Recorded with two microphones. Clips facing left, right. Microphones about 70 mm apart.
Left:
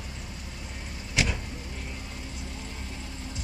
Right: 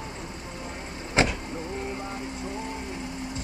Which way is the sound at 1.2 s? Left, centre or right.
Right.